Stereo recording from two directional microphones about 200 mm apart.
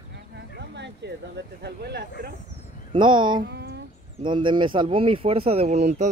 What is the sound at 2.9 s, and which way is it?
Speech, 25° right (ahead or behind).